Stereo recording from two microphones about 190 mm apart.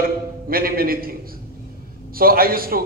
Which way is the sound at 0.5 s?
50° right (ahead or behind).